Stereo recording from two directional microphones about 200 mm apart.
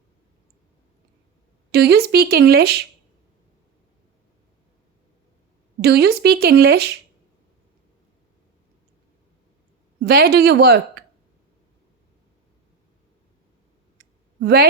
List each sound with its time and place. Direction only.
1.7 s speech: 55° right (ahead or behind)
5.8 s speech: 55° right (ahead or behind)
10.0 s speech: 50° right (ahead or behind)
14.4 s speech: 55° right (ahead or behind)